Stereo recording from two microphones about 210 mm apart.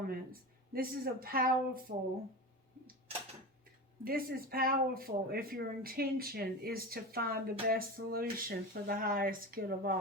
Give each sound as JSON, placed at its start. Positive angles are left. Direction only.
{"t": 0.1, "sound": "speech", "side_deg": -45}
{"t": 4.0, "sound": "speech", "side_deg": -45}